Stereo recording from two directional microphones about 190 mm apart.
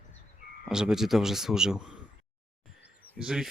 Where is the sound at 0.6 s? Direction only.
5° right (ahead or behind).